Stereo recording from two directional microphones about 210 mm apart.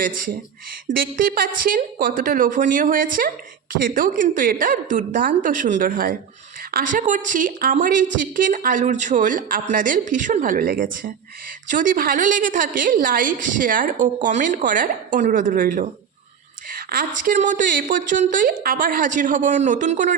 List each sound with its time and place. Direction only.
0.0 s a woman's voice: 40° right (ahead or behind)